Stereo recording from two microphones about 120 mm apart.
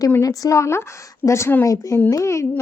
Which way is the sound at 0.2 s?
30° left (ahead or behind).